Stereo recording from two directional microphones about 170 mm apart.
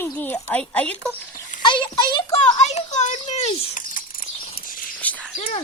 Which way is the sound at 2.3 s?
40° left (ahead or behind).